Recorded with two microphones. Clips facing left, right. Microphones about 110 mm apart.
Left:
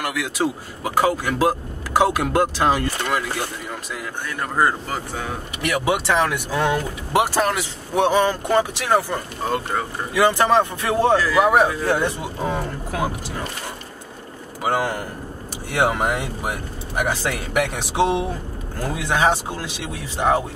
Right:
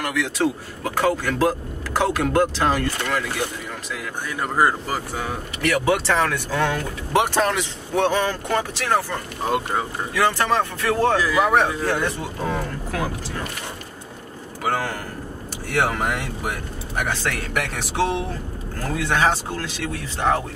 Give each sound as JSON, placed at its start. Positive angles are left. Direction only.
{"t": 0.0, "sound": "speech", "side_deg": 10}
{"t": 4.4, "sound": "speech", "side_deg": -5}
{"t": 5.6, "sound": "speech", "side_deg": 15}
{"t": 7.2, "sound": "speech", "side_deg": 5}
{"t": 11.1, "sound": "speech", "side_deg": -15}
{"t": 11.4, "sound": "speech", "side_deg": 10}
{"t": 14.6, "sound": "speech", "side_deg": 15}